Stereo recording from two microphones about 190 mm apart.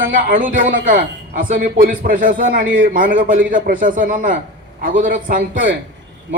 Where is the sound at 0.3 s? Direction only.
45° right (ahead or behind).